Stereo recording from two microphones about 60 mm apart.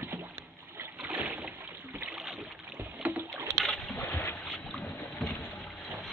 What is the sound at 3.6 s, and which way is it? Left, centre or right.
Boat, centre.